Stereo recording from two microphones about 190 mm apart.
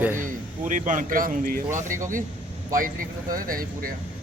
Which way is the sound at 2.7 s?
45° right (ahead or behind).